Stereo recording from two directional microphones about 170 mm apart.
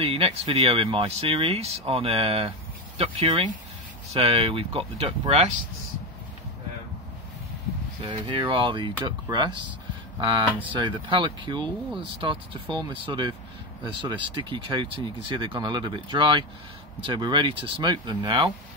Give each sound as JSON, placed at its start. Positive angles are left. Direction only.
{"t": 0.0, "sound": "speech", "side_deg": -35}
{"t": 8.0, "sound": "speech", "side_deg": -30}